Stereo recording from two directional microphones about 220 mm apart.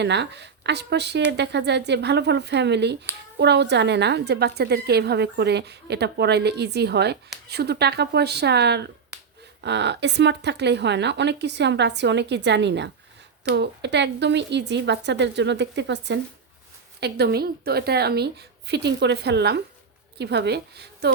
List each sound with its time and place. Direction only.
0.0 s a woman's voice: 50° right (ahead or behind)